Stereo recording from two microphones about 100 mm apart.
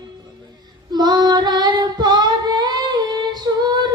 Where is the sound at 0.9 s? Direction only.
45° right (ahead or behind).